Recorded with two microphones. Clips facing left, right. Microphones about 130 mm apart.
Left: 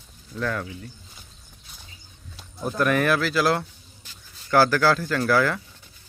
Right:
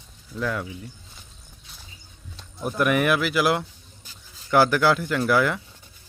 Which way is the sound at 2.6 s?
15° right (ahead or behind).